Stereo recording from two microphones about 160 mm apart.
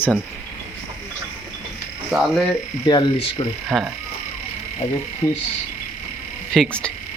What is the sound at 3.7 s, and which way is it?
Speech, 10° right (ahead or behind).